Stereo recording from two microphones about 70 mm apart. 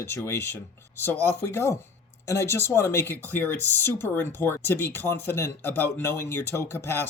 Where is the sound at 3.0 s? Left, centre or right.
Left.